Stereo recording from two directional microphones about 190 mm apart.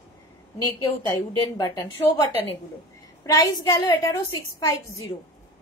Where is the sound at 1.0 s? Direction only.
15° left (ahead or behind).